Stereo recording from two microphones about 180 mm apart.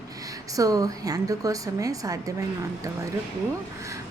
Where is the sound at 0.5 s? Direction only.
20° right (ahead or behind).